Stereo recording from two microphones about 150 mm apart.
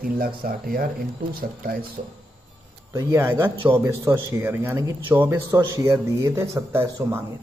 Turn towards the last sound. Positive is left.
turn(degrees=-20)  # may be behind; listen again after turning